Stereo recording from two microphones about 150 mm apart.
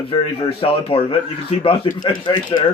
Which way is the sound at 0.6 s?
40° left (ahead or behind).